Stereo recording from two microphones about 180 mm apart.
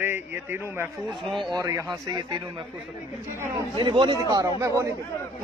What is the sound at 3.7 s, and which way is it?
Speech, 25° right (ahead or behind).